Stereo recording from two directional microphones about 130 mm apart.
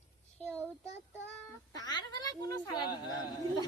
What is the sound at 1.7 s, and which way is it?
Speech, 30° left (ahead or behind).